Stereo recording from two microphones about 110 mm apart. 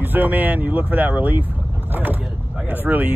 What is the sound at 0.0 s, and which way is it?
Speech, 15° right (ahead or behind).